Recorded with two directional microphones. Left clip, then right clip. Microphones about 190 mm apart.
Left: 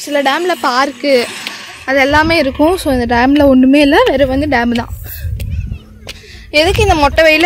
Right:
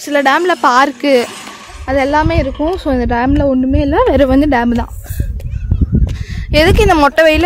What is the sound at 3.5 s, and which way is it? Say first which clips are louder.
Speech: left 6 dB; 25° left (ahead or behind).